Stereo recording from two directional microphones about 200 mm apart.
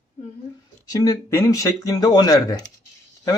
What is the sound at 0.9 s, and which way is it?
Speech, 15° left (ahead or behind).